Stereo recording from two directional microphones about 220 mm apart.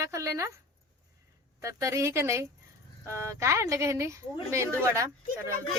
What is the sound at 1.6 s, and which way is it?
A woman's voice, 15° right (ahead or behind).